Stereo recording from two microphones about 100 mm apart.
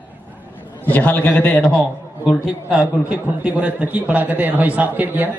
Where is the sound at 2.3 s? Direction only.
10° right (ahead or behind).